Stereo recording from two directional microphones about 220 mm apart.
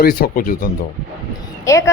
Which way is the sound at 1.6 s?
15° left (ahead or behind).